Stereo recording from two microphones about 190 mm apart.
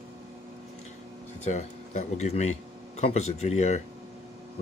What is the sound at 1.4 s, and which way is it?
Speech, 40° left (ahead or behind).